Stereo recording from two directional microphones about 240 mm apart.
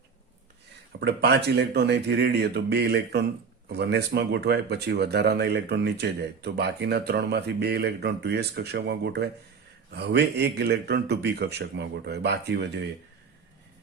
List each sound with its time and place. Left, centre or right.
0.9 s speech: right